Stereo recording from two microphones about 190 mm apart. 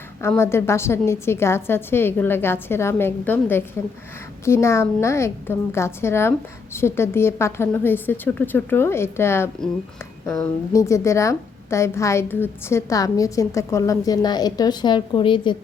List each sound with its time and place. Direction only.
0.2 s a woman's voice: 15° left (ahead or behind)
10.7 s a woman's voice: 15° left (ahead or behind)